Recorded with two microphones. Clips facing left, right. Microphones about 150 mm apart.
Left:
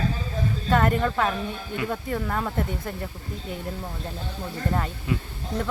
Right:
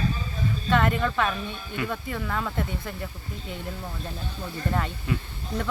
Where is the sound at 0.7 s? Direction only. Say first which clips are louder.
Left 2 dB; 40° left (ahead or behind).